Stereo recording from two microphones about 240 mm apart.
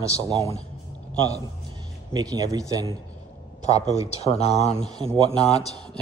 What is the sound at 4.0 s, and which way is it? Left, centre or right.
Speech, left.